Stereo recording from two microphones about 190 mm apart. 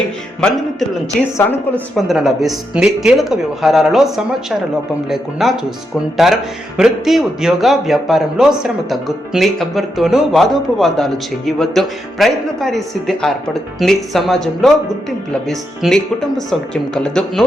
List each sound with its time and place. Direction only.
0.4 s a man's voice: centre (ahead or behind)
1.4 s speech: 10° left (ahead or behind)
2.0 s a man's voice: centre (ahead or behind)